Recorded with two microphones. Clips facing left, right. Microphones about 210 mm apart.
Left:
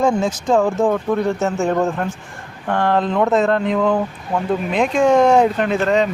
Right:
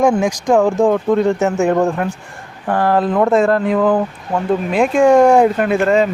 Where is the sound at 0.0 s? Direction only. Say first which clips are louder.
Right 3 dB; 15° right (ahead or behind).